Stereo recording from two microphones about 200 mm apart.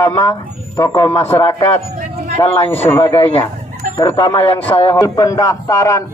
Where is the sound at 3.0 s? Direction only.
30° left (ahead or behind).